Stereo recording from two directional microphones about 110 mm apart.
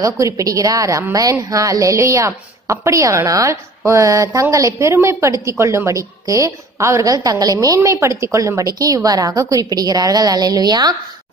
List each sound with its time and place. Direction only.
0.0 s a woman's voice: 30° right (ahead or behind)